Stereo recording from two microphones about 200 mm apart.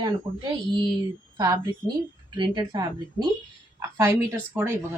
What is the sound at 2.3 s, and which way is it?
Speech, 20° right (ahead or behind).